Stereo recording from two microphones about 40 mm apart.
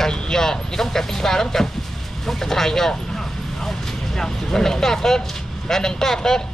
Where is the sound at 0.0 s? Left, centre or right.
Centre.